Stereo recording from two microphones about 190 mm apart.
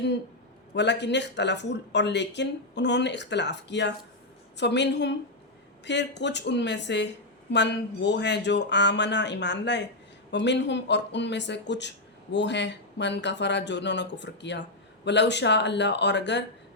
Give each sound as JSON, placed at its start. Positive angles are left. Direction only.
{"t": 0.7, "sound": "speech", "side_deg": 65}